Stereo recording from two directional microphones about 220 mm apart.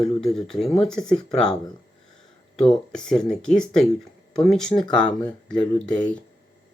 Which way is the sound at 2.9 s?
Centre (ahead or behind).